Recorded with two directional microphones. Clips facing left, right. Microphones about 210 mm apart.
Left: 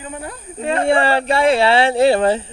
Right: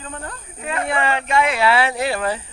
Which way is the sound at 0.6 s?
30° left (ahead or behind).